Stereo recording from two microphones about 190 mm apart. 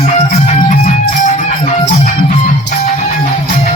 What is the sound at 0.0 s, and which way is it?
Music, 40° left (ahead or behind).